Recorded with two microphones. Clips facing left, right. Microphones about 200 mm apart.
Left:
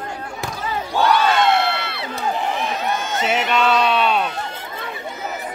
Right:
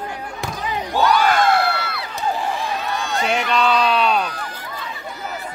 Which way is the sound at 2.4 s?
20° left (ahead or behind).